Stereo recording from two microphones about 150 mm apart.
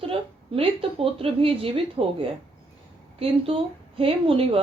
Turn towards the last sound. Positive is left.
turn(degrees=-35)  # may be behind; listen again after turning